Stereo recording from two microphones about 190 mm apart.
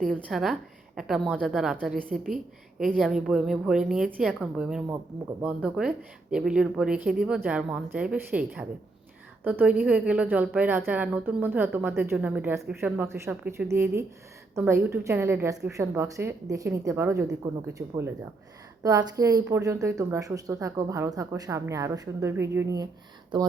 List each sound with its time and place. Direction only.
0.0 s a woman's voice: 5° left (ahead or behind); by 22.9 s 15° right (ahead or behind)